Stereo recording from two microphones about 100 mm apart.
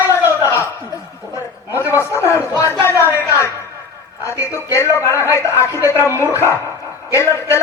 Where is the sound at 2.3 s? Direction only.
30° left (ahead or behind).